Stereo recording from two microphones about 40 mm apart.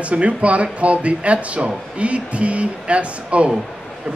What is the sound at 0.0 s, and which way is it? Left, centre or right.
Speech, right.